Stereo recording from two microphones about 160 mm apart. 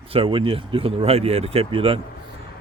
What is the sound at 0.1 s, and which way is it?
Speech, 35° right (ahead or behind).